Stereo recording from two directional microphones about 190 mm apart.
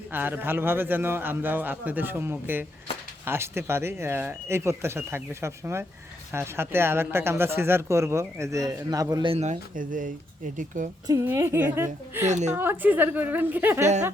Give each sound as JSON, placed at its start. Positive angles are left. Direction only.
{"t": 0.1, "sound": "speech", "side_deg": -10}
{"t": 11.0, "sound": "speech", "side_deg": -15}
{"t": 12.3, "sound": "a woman's voice", "side_deg": -40}
{"t": 12.5, "sound": "speech", "side_deg": -10}